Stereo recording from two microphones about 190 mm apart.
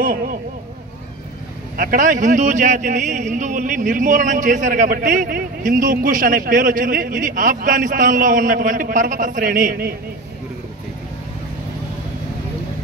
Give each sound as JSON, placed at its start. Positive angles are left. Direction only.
{"t": 0.0, "sound": "speech", "side_deg": -45}
{"t": 1.8, "sound": "speech", "side_deg": -45}